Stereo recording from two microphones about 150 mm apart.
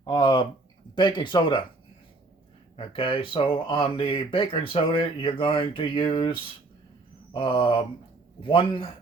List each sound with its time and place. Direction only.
0.0 s speech: 30° left (ahead or behind)
2.7 s speech: 35° left (ahead or behind)